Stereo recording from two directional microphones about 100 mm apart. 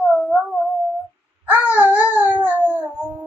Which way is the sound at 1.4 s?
15° right (ahead or behind).